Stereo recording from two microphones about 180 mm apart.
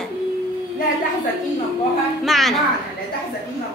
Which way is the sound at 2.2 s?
Centre (ahead or behind).